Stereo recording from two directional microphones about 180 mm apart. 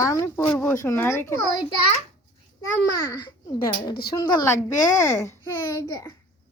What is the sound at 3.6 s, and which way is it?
Speech, 25° left (ahead or behind).